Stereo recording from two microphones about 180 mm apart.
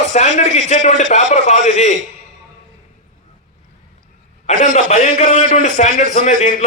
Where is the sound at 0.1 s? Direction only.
40° left (ahead or behind).